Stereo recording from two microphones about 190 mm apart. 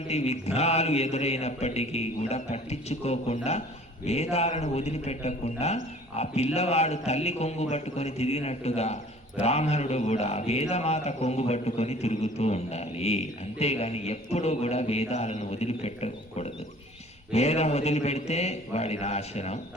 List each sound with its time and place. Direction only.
0.1 s speech: 35° left (ahead or behind)